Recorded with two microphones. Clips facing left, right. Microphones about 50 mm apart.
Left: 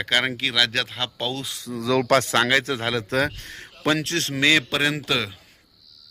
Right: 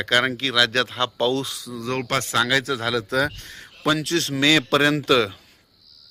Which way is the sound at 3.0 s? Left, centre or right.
Left.